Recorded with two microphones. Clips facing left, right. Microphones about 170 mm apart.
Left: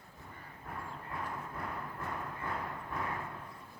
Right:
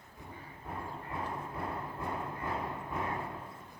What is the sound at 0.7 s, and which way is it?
Horse, 25° right (ahead or behind).